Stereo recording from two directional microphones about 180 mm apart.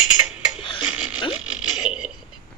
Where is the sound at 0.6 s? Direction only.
30° left (ahead or behind).